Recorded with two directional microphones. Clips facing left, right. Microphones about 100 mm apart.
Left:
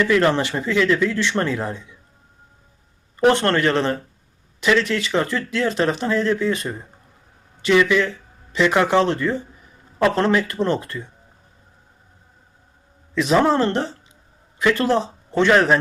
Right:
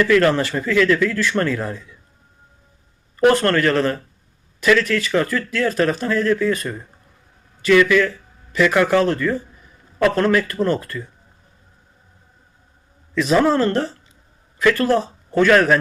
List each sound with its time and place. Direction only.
0.0 s speech: 20° left (ahead or behind)
3.2 s speech: 25° left (ahead or behind)
13.1 s a man's voice: 25° left (ahead or behind)